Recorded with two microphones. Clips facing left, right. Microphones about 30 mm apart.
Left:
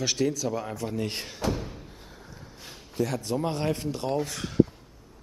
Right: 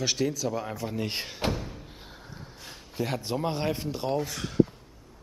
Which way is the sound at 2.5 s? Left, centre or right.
Centre.